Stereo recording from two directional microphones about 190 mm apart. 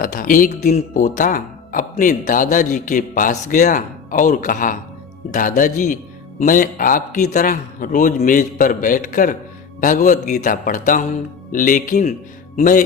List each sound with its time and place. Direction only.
0.0 s speech: 45° left (ahead or behind)